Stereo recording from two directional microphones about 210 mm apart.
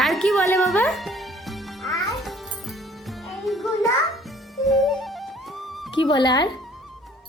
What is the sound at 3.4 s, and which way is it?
Music, centre (ahead or behind).